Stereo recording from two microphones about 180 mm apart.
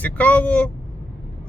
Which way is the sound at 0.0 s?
10° left (ahead or behind).